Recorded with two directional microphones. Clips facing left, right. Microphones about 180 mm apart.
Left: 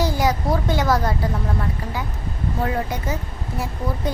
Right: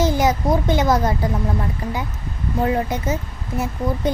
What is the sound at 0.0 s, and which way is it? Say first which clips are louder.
A child's voice: right 3 dB; 20° right (ahead or behind).